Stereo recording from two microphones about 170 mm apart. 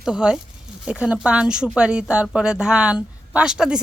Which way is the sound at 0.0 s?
5° right (ahead or behind).